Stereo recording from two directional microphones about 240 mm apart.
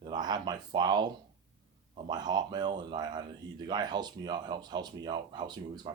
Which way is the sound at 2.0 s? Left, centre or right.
Centre.